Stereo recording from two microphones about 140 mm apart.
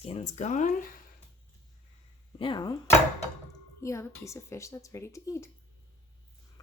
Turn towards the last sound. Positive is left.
turn(degrees=20)  # may be behind; listen again after turning